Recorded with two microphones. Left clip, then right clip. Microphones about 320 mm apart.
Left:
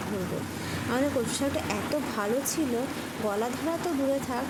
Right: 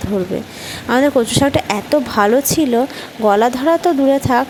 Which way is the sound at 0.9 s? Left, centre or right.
Right.